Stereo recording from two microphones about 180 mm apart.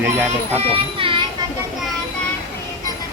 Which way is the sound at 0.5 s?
30° right (ahead or behind).